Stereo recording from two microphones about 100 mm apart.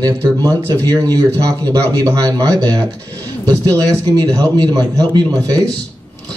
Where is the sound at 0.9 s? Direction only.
40° right (ahead or behind).